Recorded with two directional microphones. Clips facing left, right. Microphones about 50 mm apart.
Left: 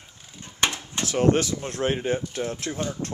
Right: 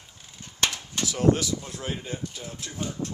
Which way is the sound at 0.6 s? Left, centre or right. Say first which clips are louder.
Left 2 dB; left.